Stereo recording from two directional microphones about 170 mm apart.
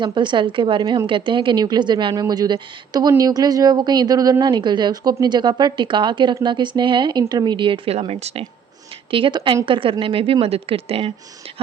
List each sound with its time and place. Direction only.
0.0 s a woman's voice: 25° right (ahead or behind)